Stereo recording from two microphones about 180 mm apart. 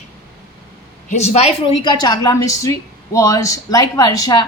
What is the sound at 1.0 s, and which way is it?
A woman's voice, 35° left (ahead or behind).